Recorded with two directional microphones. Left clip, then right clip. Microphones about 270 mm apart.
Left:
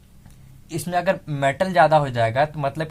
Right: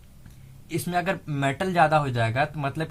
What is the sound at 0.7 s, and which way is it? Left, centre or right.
Speech, left.